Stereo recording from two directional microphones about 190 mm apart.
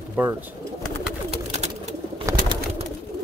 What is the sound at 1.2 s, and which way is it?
Bird, 35° right (ahead or behind).